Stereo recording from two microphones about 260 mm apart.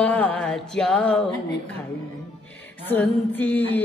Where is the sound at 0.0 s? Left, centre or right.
Centre.